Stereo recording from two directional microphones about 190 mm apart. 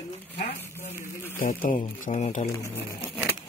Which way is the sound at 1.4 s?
45° left (ahead or behind).